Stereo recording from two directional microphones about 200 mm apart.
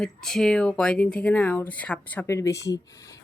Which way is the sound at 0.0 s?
Centre (ahead or behind).